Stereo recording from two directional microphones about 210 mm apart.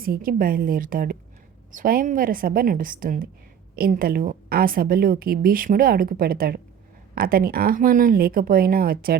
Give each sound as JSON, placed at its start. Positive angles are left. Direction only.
{"t": 0.0, "sound": "a woman's voice", "side_deg": -45}